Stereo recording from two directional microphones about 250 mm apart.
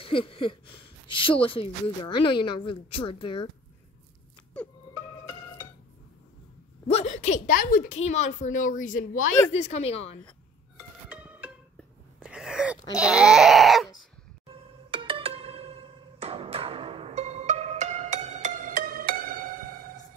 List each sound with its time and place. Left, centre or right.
0.0 s speech: left
6.9 s speech: left
11.1 s music: centre
12.9 s a sound: centre
14.9 s music: right